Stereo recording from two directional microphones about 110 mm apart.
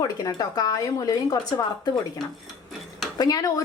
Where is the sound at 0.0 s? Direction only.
35° left (ahead or behind).